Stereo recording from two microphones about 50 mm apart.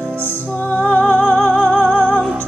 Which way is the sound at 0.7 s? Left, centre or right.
Left.